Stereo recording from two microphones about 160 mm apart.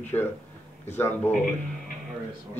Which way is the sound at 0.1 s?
15° left (ahead or behind).